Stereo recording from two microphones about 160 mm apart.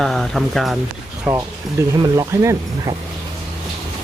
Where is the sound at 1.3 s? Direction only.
15° right (ahead or behind).